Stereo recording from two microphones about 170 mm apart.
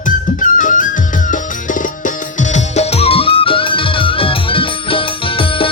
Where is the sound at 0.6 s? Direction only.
50° left (ahead or behind).